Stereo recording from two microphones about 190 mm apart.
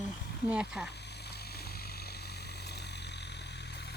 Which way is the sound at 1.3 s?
55° left (ahead or behind).